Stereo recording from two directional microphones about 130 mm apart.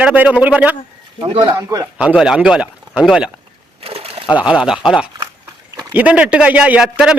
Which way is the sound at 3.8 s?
50° right (ahead or behind).